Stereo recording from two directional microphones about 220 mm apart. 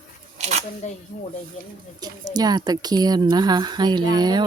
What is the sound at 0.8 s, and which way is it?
Speech, 35° left (ahead or behind).